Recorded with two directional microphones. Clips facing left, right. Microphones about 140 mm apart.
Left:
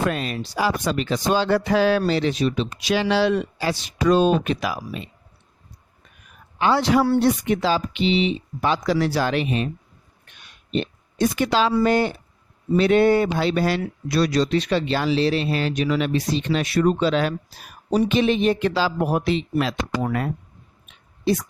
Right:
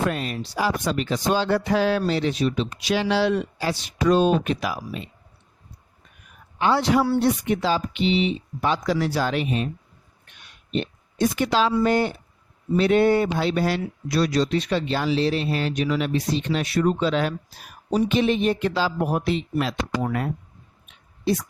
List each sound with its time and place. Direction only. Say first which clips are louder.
0.0 s speech: left 1 dB; 90° left
6.6 s speech: left 1 dB; 90° left
10.7 s speech: left 2 dB; 90° left